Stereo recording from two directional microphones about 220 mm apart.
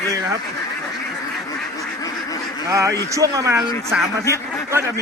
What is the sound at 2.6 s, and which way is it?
Speech, 15° right (ahead or behind).